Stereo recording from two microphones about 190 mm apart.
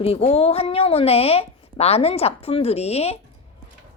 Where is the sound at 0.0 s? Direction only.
30° left (ahead or behind).